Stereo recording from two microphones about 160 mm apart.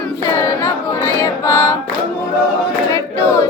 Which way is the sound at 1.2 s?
15° left (ahead or behind).